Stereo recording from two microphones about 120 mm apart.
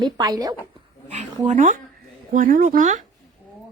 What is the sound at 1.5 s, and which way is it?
Speech, 90° right.